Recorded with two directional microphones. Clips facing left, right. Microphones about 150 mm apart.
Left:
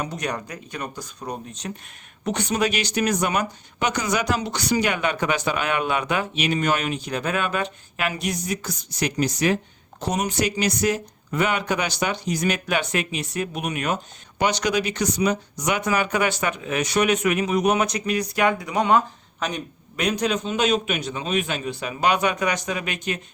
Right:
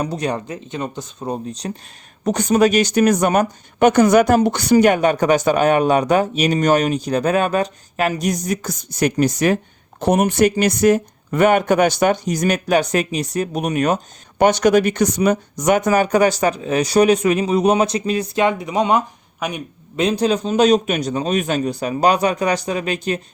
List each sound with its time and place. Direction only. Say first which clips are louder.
0.0 s speech: right 6 dB; 30° right (ahead or behind); by 19.6 s 10° right (ahead or behind)
20.0 s speech: right 6 dB; 30° right (ahead or behind)